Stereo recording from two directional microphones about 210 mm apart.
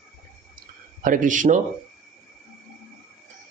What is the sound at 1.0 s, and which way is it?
Speech, 40° right (ahead or behind).